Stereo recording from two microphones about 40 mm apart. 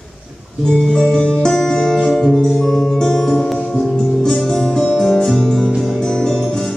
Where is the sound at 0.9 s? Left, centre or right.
Centre.